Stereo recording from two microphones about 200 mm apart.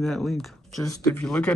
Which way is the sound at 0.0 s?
Centre (ahead or behind).